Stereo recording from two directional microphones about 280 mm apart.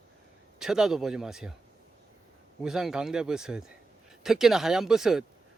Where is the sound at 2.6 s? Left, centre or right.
Centre.